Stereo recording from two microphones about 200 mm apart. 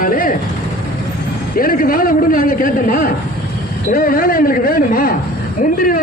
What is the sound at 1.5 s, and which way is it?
A man's voice, 45° left (ahead or behind).